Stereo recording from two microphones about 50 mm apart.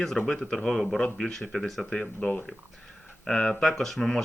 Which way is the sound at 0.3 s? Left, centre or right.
Centre.